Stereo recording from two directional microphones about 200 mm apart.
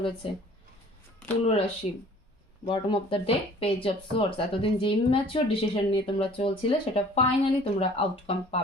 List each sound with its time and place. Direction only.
1.5 s speech: 30° left (ahead or behind)